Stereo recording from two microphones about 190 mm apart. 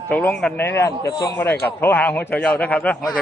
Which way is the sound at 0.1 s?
5° left (ahead or behind).